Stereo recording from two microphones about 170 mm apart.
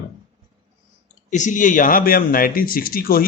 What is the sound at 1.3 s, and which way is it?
Speech, 45° left (ahead or behind).